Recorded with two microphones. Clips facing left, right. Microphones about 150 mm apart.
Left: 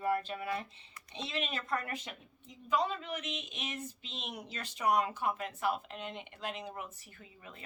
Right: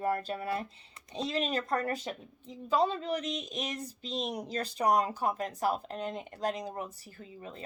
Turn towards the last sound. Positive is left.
turn(degrees=-35)  # may be behind; listen again after turning